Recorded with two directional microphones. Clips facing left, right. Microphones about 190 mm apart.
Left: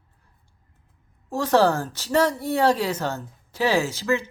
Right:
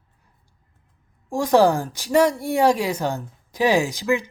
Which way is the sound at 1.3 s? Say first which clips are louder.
Right 3 dB; 15° right (ahead or behind).